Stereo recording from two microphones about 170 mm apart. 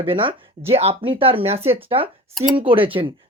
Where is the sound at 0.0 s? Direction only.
30° right (ahead or behind).